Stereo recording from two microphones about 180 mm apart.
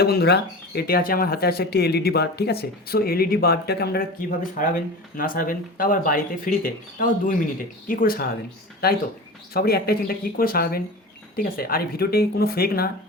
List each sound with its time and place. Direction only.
0.0 s speech: 60° left (ahead or behind)
9.5 s speech: 60° left (ahead or behind)